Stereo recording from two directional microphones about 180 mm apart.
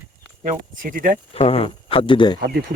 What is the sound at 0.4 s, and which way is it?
Speech, 50° right (ahead or behind).